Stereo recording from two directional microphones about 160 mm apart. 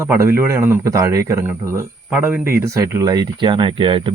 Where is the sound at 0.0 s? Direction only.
15° right (ahead or behind).